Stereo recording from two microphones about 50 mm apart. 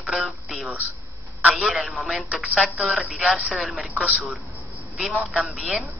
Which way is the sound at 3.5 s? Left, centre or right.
Centre.